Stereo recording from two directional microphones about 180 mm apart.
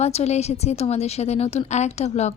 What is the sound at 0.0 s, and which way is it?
A woman's voice, 35° left (ahead or behind).